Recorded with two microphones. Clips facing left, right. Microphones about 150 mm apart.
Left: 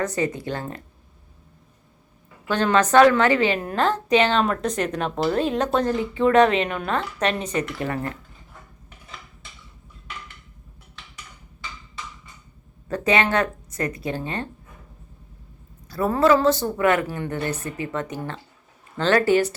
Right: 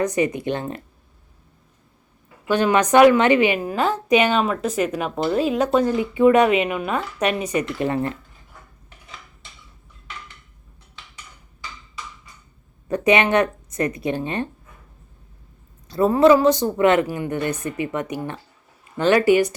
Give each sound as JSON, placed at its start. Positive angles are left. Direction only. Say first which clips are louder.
{"t": 0.0, "sound": "speech", "louder": "right 4 dB", "side_deg": -15}
{"t": 2.5, "sound": "speech", "louder": "right 2 dB", "side_deg": -10}
{"t": 12.9, "sound": "speech", "louder": "right 3 dB", "side_deg": -20}
{"t": 15.9, "sound": "speech", "louder": "right 4 dB", "side_deg": -20}